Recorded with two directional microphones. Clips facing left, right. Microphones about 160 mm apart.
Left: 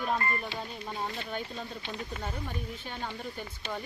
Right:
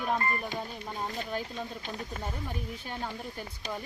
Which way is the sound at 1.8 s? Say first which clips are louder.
Even; 40° right (ahead or behind).